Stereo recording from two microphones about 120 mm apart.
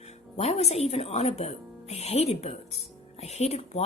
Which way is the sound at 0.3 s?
60° left (ahead or behind).